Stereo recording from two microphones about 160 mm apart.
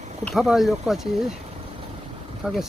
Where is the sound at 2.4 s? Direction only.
5° right (ahead or behind).